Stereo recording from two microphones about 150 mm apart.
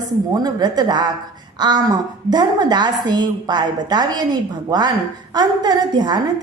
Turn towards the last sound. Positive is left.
turn(degrees=-30)  # may be behind; listen again after turning